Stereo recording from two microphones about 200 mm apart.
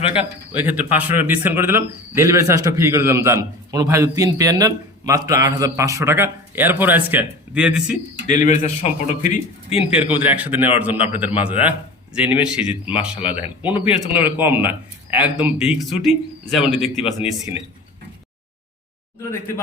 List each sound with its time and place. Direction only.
0.1 s speech: 10° right (ahead or behind)
8.3 s a man's voice: 35° left (ahead or behind)
10.3 s speech: 10° right (ahead or behind)
13.1 s a man's voice: 30° left (ahead or behind)
13.6 s speech: 10° right (ahead or behind)
17.2 s a man's voice: 30° left (ahead or behind)